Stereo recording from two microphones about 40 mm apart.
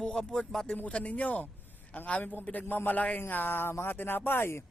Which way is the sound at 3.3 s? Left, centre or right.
Left.